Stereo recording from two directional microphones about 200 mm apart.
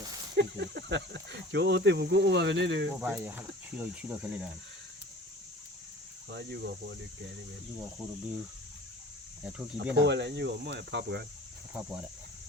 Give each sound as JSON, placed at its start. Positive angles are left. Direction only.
{"t": 0.3, "sound": "speech", "side_deg": -60}
{"t": 2.9, "sound": "speech", "side_deg": -10}
{"t": 6.3, "sound": "speech", "side_deg": -55}
{"t": 9.4, "sound": "speech", "side_deg": -10}
{"t": 9.7, "sound": "speech", "side_deg": -60}